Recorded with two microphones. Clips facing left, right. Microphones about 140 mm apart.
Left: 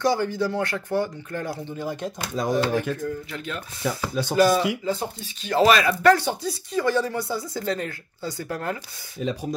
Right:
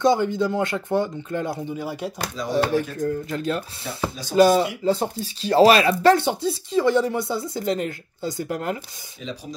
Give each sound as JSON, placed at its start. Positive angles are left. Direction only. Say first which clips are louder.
{"t": 0.0, "sound": "speech", "louder": "right 3 dB", "side_deg": -20}
{"t": 1.7, "sound": "speech", "louder": "right 1 dB", "side_deg": -5}
{"t": 2.6, "sound": "speech", "louder": "right 2 dB", "side_deg": -40}
{"t": 4.1, "sound": "speech", "louder": "left 5 dB", "side_deg": 60}
{"t": 4.4, "sound": "speech", "louder": "right 4 dB", "side_deg": -25}